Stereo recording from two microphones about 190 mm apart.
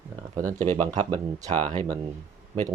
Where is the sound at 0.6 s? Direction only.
35° right (ahead or behind).